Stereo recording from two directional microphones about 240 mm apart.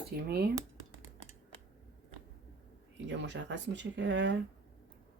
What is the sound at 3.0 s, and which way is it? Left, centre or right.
Speech, right.